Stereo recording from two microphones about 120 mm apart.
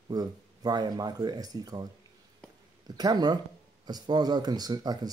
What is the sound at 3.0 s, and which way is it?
Speech, 35° right (ahead or behind).